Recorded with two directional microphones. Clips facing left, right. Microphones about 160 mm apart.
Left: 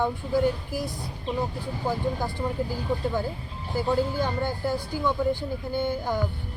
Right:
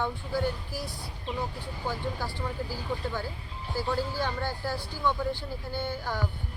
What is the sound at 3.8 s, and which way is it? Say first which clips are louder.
Speech: left 5 dB; 20° left (ahead or behind).